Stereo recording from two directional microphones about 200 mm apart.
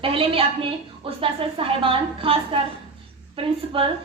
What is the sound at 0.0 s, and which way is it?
A woman's voice, 25° right (ahead or behind).